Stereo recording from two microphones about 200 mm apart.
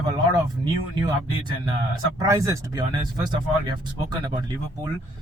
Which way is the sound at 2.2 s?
15° right (ahead or behind).